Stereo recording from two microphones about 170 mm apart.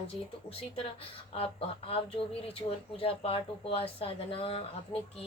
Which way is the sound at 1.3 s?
35° left (ahead or behind).